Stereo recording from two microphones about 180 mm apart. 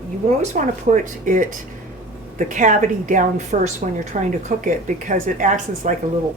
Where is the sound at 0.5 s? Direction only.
45° right (ahead or behind).